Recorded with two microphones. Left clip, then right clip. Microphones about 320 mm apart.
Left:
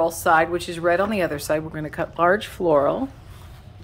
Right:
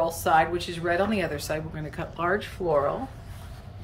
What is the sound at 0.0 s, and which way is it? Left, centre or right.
Speech, centre.